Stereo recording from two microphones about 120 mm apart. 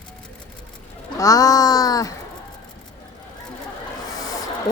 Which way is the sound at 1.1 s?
30° left (ahead or behind).